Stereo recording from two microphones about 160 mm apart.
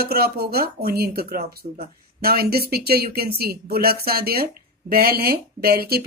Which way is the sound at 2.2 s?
70° right (ahead or behind).